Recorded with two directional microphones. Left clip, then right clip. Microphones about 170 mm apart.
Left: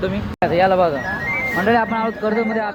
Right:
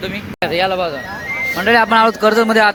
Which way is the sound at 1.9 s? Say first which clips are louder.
Right 9 dB; 30° right (ahead or behind).